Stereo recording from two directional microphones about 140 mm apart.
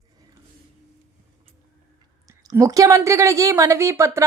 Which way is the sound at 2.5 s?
25° right (ahead or behind).